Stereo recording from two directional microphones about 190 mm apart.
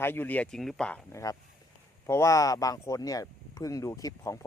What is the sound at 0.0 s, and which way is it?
Speech, 10° left (ahead or behind).